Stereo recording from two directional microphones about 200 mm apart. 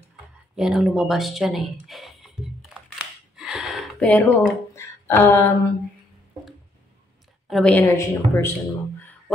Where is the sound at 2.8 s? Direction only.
5° right (ahead or behind); by 5.5 s 15° left (ahead or behind).